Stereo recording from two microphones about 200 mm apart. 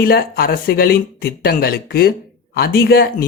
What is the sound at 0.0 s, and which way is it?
Speech, 50° left (ahead or behind).